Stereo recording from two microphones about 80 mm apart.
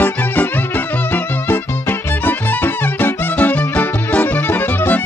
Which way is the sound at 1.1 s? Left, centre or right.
Left.